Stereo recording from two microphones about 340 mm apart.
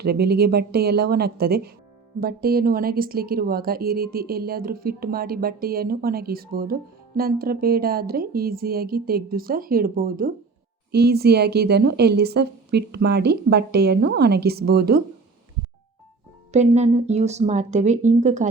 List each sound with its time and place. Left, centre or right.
0.0 s speech: right
16.5 s speech: centre